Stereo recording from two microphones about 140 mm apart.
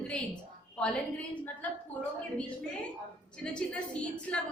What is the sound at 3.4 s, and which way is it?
A woman's voice, 5° left (ahead or behind).